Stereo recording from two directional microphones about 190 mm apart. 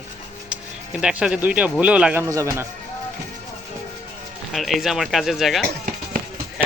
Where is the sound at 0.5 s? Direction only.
5° right (ahead or behind).